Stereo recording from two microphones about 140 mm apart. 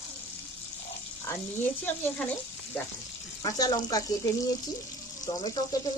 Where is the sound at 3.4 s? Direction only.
25° left (ahead or behind).